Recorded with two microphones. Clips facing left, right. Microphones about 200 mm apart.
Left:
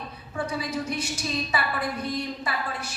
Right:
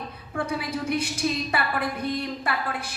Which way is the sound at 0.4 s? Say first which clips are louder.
Right 1 dB; 55° right (ahead or behind).